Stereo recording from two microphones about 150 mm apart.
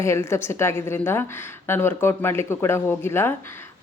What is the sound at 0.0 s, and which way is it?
Speech, 20° left (ahead or behind).